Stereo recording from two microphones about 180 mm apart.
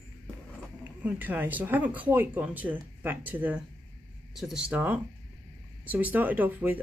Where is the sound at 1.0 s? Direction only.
10° right (ahead or behind).